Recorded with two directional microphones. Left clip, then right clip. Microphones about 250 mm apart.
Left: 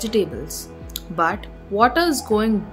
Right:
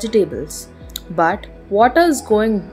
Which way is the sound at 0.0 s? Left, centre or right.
Centre.